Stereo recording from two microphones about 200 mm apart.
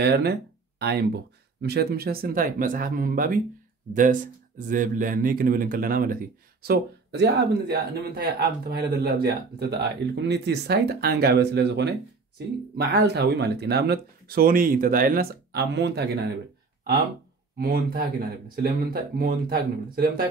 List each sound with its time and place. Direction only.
0.0 s speech: 55° right (ahead or behind)
6.6 s speech: 55° right (ahead or behind)
17.6 s speech: 50° right (ahead or behind)
19.1 s speech: 50° right (ahead or behind)